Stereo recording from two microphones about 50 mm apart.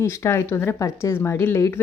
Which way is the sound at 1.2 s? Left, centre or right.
Left.